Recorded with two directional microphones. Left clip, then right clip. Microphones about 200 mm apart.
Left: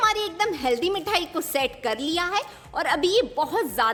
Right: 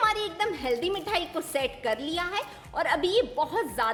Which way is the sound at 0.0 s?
20° left (ahead or behind).